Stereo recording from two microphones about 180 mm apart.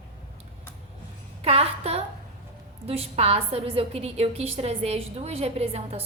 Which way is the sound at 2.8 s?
35° right (ahead or behind).